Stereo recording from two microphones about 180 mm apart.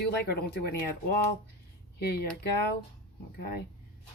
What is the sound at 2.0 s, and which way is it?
Speech, 60° left (ahead or behind).